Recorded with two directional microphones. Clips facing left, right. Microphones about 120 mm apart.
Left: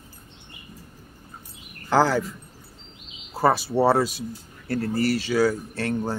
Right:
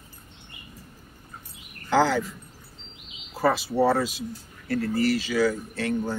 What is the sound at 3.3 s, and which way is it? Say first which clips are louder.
Speech: left 2 dB; 35° left (ahead or behind).